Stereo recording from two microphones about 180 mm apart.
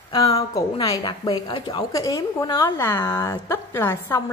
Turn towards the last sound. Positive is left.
turn(degrees=15)  # may be behind; listen again after turning